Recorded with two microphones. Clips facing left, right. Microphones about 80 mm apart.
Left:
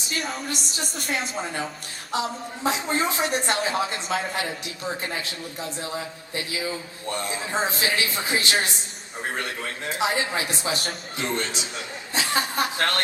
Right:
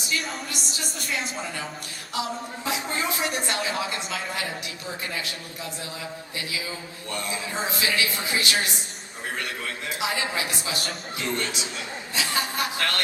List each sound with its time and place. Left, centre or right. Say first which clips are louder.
0.1 s a woman's voice: left 2 dB; left
2.1 s a man's voice: left 2 dB; left
3.4 s speech: left 3 dB; left
4.4 s a man's voice: left 2 dB; left